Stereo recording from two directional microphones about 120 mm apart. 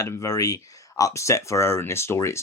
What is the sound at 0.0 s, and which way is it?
Speech, 30° left (ahead or behind).